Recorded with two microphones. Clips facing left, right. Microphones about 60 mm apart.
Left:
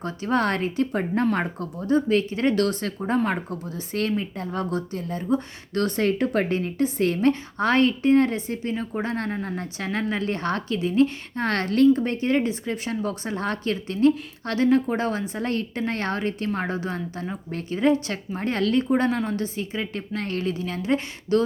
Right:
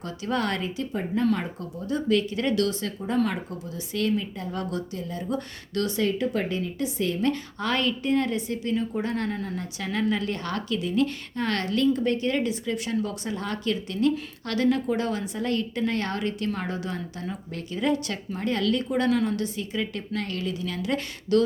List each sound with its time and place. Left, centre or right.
0.0 s speech: left
1.9 s speech: left